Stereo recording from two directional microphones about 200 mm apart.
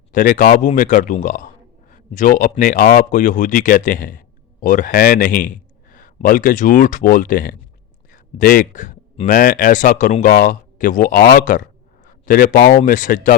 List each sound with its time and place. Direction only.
0.1 s speech: 40° left (ahead or behind)